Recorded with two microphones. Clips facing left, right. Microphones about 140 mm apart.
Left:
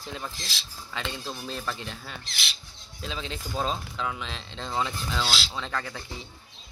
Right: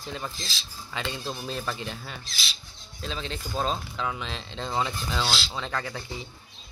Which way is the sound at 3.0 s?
Centre (ahead or behind).